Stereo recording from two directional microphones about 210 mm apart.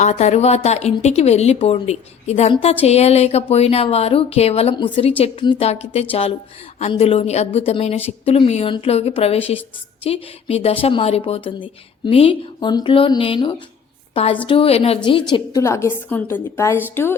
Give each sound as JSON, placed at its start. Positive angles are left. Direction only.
{"t": 0.0, "sound": "a woman's voice", "side_deg": 30}